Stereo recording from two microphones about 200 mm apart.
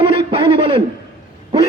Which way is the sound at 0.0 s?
25° right (ahead or behind).